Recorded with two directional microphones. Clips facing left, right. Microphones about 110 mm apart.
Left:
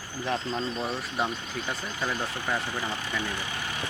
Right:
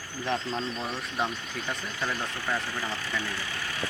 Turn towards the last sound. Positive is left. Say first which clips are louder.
# left 1 dB
turn(degrees=20)  # may be behind; listen again after turning